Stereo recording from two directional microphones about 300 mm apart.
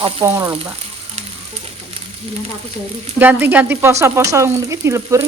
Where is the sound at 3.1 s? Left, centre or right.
Centre.